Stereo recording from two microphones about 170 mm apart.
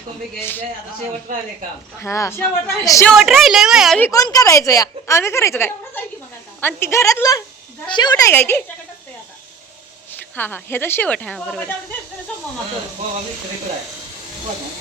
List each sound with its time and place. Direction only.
0.3 s speech: 10° left (ahead or behind)
2.0 s speech: 15° left (ahead or behind)
3.1 s a woman's voice: centre (ahead or behind)
4.0 s a woman's voice: 20° left (ahead or behind)
8.3 s speech: 15° left (ahead or behind)
10.1 s speech: 10° left (ahead or behind)